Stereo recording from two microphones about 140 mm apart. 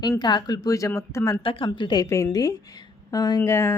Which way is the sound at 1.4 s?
35° left (ahead or behind).